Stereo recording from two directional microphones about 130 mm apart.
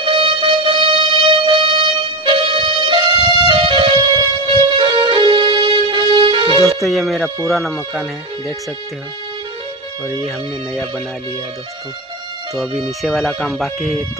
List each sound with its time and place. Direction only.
0.0 s music: 45° right (ahead or behind)
6.8 s speech: centre (ahead or behind)
10.2 s speech: centre (ahead or behind)
12.5 s speech: centre (ahead or behind)